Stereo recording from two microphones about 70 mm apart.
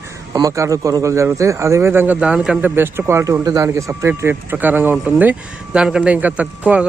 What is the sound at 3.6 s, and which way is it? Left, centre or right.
A man's voice, right.